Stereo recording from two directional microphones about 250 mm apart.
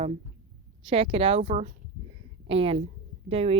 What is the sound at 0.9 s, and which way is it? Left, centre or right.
Speech, centre.